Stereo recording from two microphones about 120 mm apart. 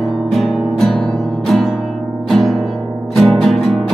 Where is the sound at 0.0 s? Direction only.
Centre (ahead or behind).